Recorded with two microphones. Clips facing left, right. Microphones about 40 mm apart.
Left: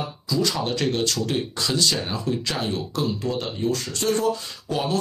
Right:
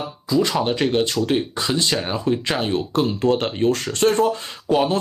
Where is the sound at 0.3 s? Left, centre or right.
Right.